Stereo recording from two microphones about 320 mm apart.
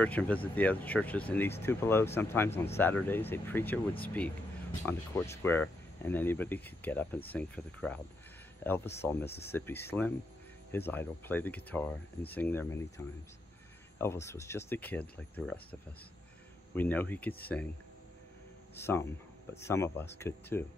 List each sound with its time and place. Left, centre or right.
0.0 s speech: centre
4.8 s speech: centre
18.8 s speech: centre